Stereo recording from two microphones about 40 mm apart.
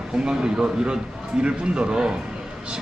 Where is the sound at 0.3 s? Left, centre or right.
Centre.